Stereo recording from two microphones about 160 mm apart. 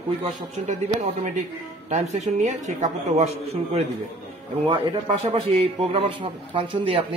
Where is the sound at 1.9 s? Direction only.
45° right (ahead or behind).